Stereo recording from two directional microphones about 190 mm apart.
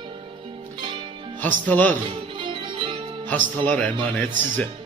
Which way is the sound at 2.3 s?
25° right (ahead or behind).